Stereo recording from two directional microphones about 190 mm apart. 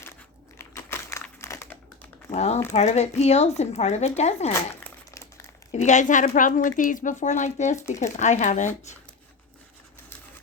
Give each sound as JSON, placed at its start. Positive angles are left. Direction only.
{"t": 0.6, "sound": "crumpling", "side_deg": 15}
{"t": 2.3, "sound": "a woman's voice", "side_deg": 35}
{"t": 4.7, "sound": "crumpling", "side_deg": 15}
{"t": 5.7, "sound": "a woman's voice", "side_deg": 40}